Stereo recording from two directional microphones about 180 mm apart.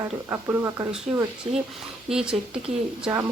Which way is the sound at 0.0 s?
15° right (ahead or behind).